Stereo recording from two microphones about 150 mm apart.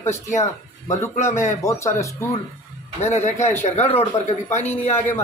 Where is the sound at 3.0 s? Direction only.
50° left (ahead or behind).